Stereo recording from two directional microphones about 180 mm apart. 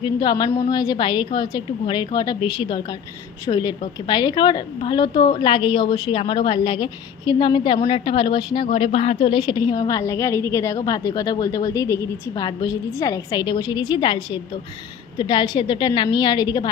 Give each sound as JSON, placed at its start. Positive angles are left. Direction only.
{"t": 0.0, "sound": "a woman's voice", "side_deg": 25}
{"t": 15.2, "sound": "a woman's voice", "side_deg": 25}